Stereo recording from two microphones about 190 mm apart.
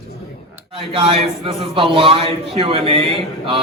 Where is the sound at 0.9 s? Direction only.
25° right (ahead or behind).